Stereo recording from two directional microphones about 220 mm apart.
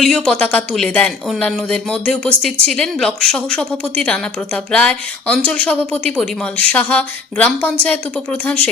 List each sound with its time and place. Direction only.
0.0 s a woman's voice: 5° left (ahead or behind)